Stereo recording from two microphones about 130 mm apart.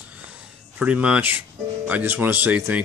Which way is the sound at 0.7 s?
10° right (ahead or behind).